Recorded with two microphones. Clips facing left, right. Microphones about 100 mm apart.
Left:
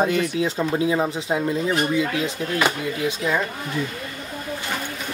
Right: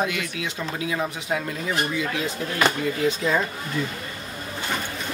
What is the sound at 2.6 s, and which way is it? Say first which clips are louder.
Speech: right 1 dB; 10° left (ahead or behind).